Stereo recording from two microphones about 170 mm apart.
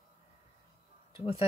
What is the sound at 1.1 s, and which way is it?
Speech, 35° left (ahead or behind).